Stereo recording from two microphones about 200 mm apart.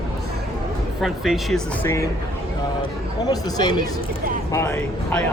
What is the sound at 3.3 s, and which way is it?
Speech, 20° left (ahead or behind).